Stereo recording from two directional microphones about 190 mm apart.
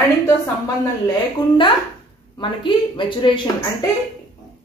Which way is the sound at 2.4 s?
25° left (ahead or behind).